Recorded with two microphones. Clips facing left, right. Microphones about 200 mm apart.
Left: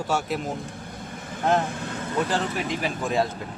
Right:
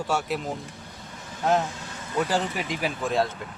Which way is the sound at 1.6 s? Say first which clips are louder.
Left 5 dB; 55° left (ahead or behind).